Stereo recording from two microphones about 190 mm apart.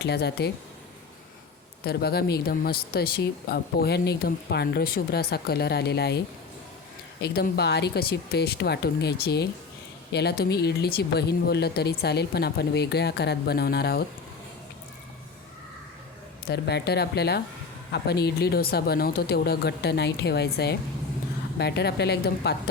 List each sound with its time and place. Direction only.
0.0 s speech: 60° left (ahead or behind)
1.8 s speech: 55° left (ahead or behind)
16.5 s speech: 60° left (ahead or behind)